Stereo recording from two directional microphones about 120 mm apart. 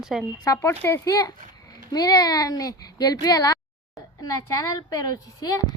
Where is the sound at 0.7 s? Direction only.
15° left (ahead or behind).